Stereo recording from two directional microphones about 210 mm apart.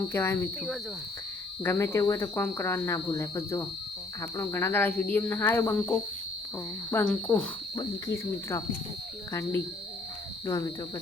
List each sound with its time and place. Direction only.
0.1 s speech: 10° left (ahead or behind)
1.6 s speech: 10° left (ahead or behind)
7.8 s speech: 15° left (ahead or behind)